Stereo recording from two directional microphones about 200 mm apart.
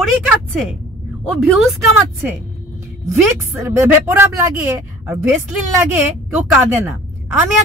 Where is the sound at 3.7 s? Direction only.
10° right (ahead or behind).